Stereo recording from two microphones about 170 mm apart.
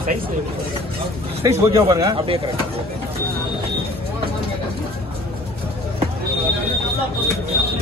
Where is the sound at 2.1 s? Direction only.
35° right (ahead or behind).